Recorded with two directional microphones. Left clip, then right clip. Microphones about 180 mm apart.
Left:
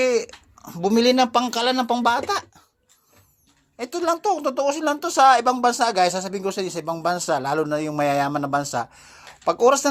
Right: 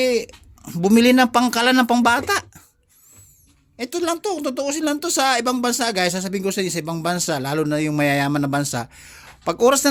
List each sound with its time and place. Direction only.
0.1 s speech: 25° right (ahead or behind)
3.8 s a woman's voice: 25° right (ahead or behind)